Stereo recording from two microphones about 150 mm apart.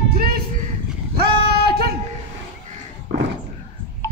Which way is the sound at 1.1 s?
90° right.